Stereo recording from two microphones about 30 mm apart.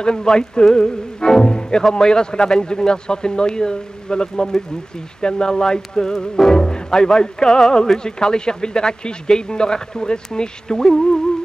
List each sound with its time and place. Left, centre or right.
0.0 s speech: left
0.7 s music: left
1.9 s speech: centre
6.5 s music: left
7.7 s speech: centre
8.0 s speech: left